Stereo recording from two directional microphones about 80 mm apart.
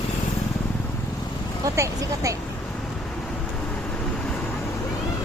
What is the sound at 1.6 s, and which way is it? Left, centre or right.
Speech, right.